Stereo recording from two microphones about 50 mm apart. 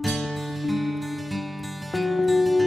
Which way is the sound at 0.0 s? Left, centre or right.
Centre.